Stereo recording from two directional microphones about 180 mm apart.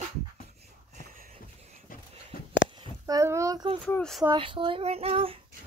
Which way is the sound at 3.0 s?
15° right (ahead or behind).